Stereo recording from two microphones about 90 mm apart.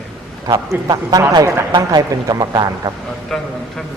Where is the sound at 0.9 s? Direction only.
45° right (ahead or behind).